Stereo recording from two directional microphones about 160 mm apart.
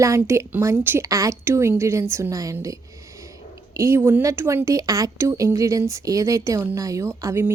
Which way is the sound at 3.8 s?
15° right (ahead or behind).